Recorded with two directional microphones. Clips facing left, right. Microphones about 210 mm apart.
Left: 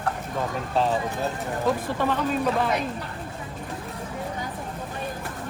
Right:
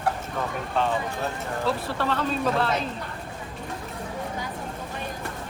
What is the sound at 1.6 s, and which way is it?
Speech, 15° left (ahead or behind).